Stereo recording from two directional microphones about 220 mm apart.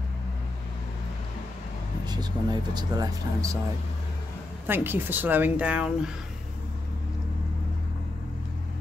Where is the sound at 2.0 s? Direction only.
20° right (ahead or behind).